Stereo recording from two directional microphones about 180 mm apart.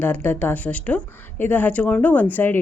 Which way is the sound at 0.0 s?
10° left (ahead or behind).